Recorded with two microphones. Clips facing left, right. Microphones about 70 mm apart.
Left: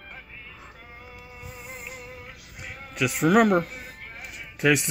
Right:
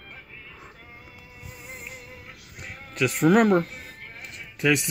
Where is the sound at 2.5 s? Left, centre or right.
Centre.